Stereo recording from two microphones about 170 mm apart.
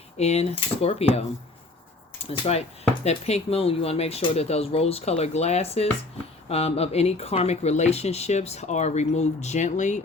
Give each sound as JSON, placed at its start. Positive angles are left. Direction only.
{"t": 0.2, "sound": "speech", "side_deg": 40}
{"t": 2.3, "sound": "speech", "side_deg": 35}